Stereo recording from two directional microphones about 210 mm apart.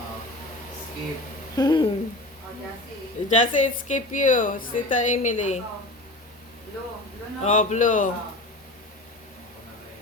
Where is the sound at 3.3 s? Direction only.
35° left (ahead or behind).